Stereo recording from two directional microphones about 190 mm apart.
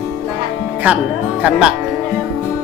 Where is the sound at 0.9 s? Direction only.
10° right (ahead or behind).